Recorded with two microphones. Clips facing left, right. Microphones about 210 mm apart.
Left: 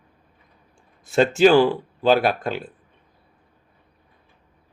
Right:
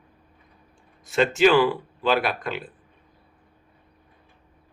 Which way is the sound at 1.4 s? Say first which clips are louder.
Left 3 dB; 35° left (ahead or behind).